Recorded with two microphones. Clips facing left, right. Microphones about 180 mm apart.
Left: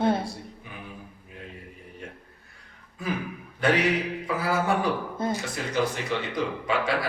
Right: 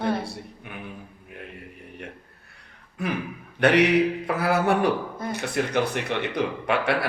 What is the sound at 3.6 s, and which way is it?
Speech, 70° right (ahead or behind).